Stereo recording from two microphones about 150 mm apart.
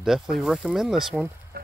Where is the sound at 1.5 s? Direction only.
90° right.